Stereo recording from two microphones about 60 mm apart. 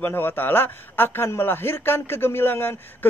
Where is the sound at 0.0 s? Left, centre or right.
Left.